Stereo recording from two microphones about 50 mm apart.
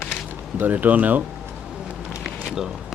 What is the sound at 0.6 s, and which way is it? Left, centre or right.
Speech, right.